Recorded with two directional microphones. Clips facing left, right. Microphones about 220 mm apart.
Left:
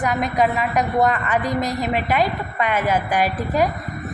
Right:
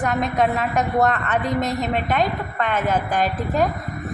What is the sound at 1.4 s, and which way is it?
Speech, 25° right (ahead or behind).